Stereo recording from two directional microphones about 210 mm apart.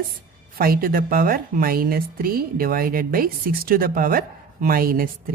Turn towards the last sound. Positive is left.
turn(degrees=-45)  # may be behind; listen again after turning